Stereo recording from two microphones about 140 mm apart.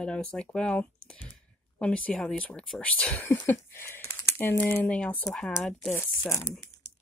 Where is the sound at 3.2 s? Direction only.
20° left (ahead or behind).